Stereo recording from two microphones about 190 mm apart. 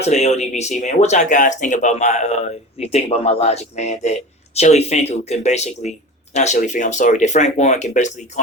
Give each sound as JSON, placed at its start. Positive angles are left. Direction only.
{"t": 0.0, "sound": "speech", "side_deg": 35}